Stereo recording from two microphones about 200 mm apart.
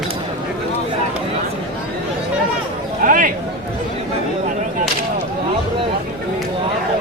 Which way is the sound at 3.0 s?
40° right (ahead or behind).